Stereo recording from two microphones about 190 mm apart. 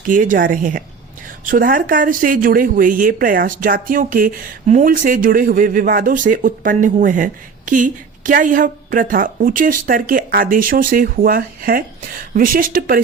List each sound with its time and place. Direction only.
0.0 s speech: 45° right (ahead or behind)